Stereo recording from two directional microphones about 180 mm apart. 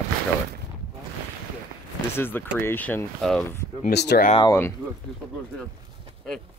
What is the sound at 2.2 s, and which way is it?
Speech, 10° left (ahead or behind).